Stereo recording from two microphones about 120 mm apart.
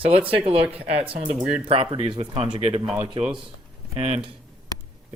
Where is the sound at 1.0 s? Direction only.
55° right (ahead or behind).